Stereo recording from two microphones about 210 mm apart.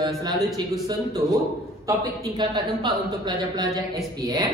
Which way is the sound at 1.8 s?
20° right (ahead or behind).